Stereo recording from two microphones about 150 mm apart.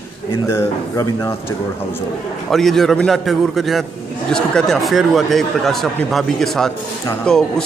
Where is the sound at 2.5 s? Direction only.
Centre (ahead or behind).